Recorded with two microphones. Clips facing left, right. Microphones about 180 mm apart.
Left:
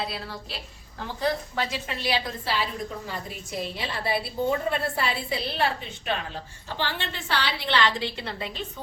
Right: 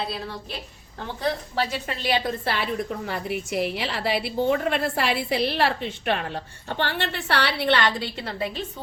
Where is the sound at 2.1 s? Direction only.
60° right (ahead or behind).